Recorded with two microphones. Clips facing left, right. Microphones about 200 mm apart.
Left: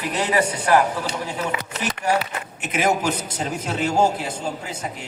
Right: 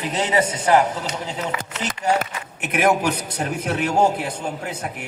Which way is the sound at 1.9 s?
55° right (ahead or behind).